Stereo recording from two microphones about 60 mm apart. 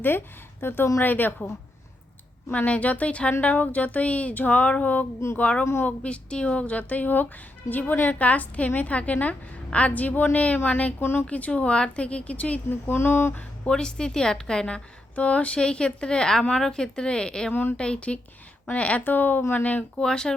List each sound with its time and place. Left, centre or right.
0.6 s speech: left
2.5 s a woman's voice: left
11.0 s speech: left
11.3 s a woman's voice: left
12.6 s speech: left
13.7 s a woman's voice: centre
15.1 s a woman's voice: left
17.5 s speech: left
17.7 s a woman's voice: centre
20.0 s a woman's voice: centre